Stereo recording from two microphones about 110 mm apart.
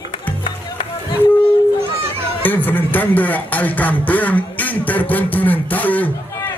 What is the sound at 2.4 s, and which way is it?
A man's voice, 15° left (ahead or behind).